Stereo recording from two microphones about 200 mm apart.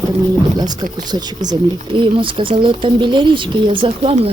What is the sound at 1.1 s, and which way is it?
Speech, 20° right (ahead or behind).